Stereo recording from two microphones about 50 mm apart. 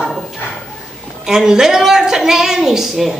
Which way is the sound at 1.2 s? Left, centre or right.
Centre.